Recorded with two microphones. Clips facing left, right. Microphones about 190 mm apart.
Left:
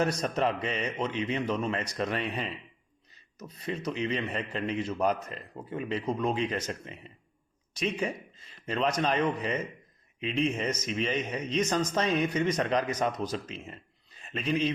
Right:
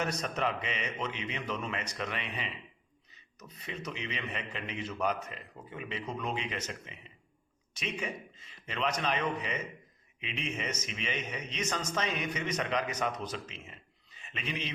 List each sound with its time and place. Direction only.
0.0 s a man's voice: 35° left (ahead or behind)